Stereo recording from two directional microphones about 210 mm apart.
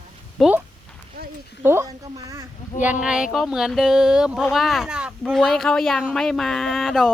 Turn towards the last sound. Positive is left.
turn(degrees=0)  # may be behind; listen again after turning